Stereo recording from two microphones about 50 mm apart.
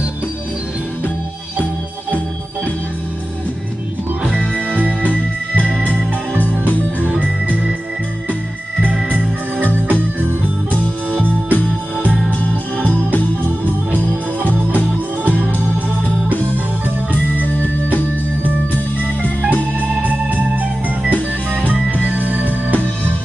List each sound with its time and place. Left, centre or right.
4.2 s music: right
7.0 s music: right
11.5 s music: left
13.4 s organ: right
19.4 s organ: right
21.0 s music: right